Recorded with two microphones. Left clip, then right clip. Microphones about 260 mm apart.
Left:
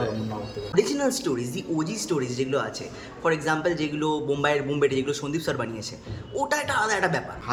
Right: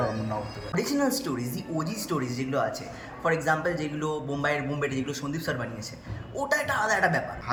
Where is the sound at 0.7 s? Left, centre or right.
Centre.